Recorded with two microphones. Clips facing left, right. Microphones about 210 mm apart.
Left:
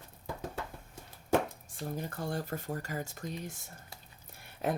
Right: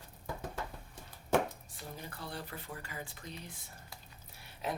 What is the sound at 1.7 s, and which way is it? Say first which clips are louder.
Speech: left 8 dB; 50° left (ahead or behind).